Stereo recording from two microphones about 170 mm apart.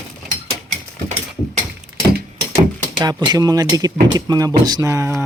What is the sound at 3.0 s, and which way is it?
Speech, 25° right (ahead or behind).